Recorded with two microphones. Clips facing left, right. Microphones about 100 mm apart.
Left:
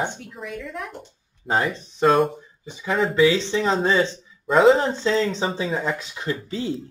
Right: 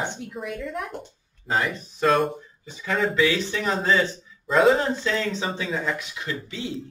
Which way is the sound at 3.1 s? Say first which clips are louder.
Left 4 dB; 25° left (ahead or behind).